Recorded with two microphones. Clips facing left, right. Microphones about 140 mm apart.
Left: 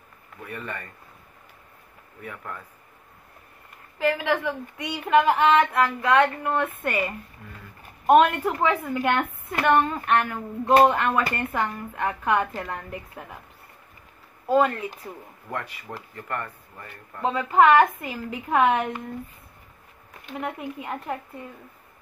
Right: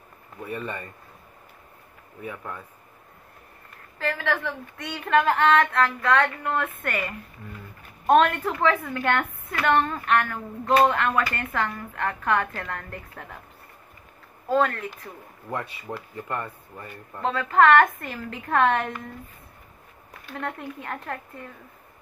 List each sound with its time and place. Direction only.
0.5 s speech: 20° right (ahead or behind)
2.2 s speech: 15° right (ahead or behind)
4.0 s speech: 15° left (ahead or behind)
9.1 s speech: 20° left (ahead or behind)
14.5 s speech: 15° left (ahead or behind)
16.2 s speech: 15° right (ahead or behind)
17.2 s speech: 10° left (ahead or behind)
20.2 s speech: 10° left (ahead or behind)